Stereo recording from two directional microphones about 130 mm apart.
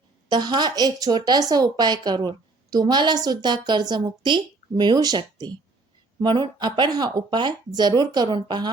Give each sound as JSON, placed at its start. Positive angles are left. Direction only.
{"t": 0.3, "sound": "a woman's voice", "side_deg": -35}